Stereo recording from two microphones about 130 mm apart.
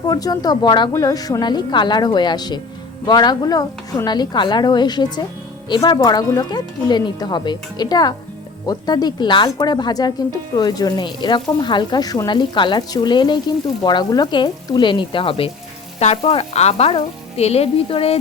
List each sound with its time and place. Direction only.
0.0 s speech: 30° left (ahead or behind)
16.0 s frying: 50° left (ahead or behind)